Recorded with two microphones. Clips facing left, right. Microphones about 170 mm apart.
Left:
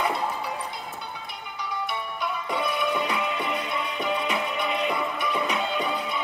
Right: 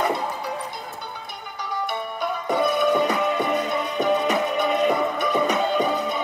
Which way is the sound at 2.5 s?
40° right (ahead or behind).